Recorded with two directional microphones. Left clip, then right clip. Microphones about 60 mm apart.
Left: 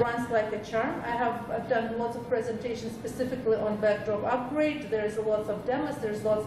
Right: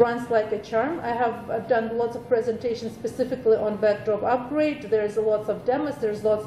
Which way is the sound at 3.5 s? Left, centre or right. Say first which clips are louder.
Right 4 dB; centre.